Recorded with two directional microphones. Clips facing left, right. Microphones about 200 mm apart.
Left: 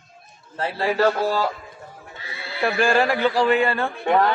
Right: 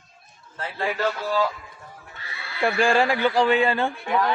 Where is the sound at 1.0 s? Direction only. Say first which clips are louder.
Left 4 dB; 55° left (ahead or behind).